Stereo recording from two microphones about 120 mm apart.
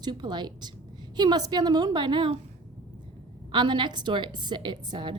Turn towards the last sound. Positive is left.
turn(degrees=-40)  # may be behind; listen again after turning